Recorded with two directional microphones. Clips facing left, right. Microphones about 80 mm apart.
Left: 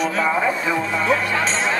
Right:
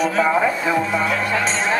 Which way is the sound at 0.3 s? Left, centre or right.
Centre.